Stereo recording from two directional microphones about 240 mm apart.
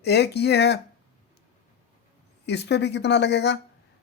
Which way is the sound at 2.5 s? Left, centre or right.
Left.